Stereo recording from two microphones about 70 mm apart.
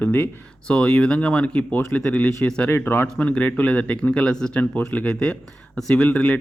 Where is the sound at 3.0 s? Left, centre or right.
Centre.